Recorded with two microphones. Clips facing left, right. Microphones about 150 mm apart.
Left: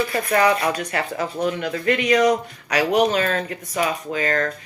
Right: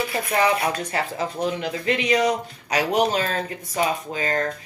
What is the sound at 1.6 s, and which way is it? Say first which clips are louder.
Speech: left 3 dB; 50° left (ahead or behind).